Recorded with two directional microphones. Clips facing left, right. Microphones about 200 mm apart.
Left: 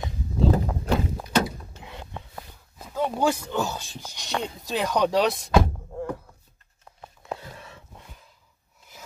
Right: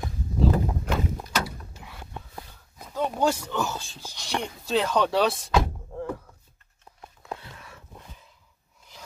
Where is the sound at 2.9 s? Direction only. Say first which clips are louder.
Left 1 dB; 10° left (ahead or behind).